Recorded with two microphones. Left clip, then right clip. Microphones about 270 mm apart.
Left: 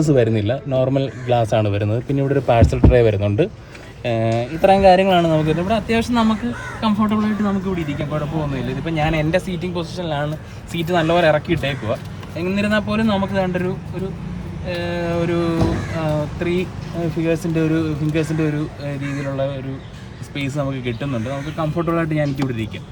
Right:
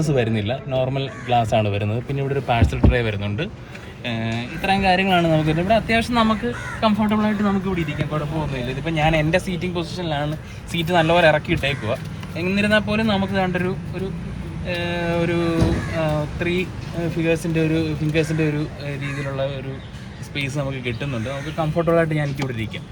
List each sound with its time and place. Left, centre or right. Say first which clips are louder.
0.0 s speech: left 5 dB; left; by 18.9 s centre
20.3 s speech: left 2 dB; centre